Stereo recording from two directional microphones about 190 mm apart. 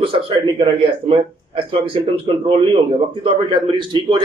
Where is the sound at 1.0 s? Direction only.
30° right (ahead or behind).